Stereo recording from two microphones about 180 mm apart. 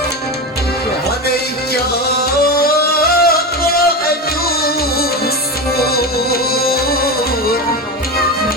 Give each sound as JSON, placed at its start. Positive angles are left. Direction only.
{"t": 1.3, "sound": "music", "side_deg": 60}